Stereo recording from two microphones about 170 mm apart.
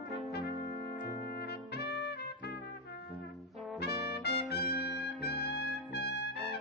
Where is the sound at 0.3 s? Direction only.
70° left (ahead or behind).